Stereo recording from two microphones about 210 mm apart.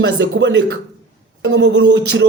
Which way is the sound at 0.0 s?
60° right (ahead or behind).